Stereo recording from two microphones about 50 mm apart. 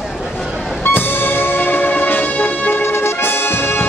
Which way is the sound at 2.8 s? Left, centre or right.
Left.